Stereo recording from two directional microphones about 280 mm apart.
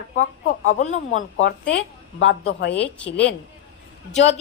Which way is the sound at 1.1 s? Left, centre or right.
Left.